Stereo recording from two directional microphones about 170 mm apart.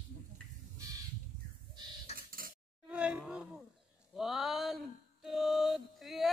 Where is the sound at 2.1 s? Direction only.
40° left (ahead or behind).